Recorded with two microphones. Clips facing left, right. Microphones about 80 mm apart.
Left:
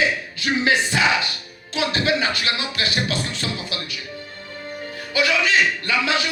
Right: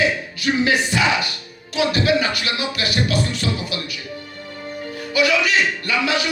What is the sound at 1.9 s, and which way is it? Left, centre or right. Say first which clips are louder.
Speech: right 2 dB; left.